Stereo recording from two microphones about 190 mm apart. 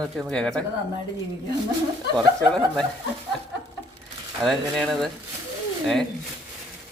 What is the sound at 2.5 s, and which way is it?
Speech, centre (ahead or behind).